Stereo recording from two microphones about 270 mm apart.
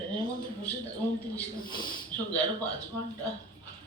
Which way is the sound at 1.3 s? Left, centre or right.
Centre.